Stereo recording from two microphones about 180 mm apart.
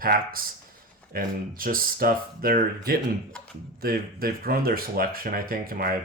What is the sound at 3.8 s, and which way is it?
Speech, 55° right (ahead or behind).